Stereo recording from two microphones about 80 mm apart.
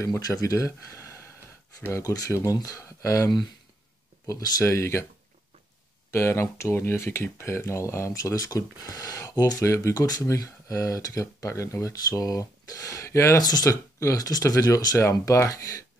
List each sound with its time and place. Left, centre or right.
0.2 s speech: left
4.3 s speech: left
6.1 s speech: left
13.4 s speech: left
13.9 s speech: left